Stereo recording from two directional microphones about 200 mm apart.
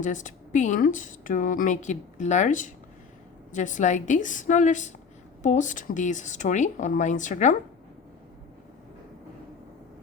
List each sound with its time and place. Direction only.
0.0 s speech: 40° left (ahead or behind)